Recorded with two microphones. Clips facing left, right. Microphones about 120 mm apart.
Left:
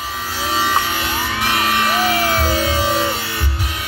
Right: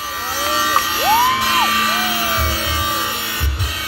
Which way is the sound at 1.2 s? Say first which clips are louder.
Right 5 dB; 80° right.